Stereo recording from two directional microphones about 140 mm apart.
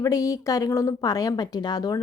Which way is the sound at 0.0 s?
25° left (ahead or behind).